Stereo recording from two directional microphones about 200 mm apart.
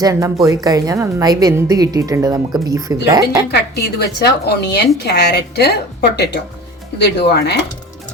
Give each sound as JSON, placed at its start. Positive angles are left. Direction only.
{"t": 0.0, "sound": "a woman's voice", "side_deg": -15}
{"t": 3.5, "sound": "a woman's voice", "side_deg": 55}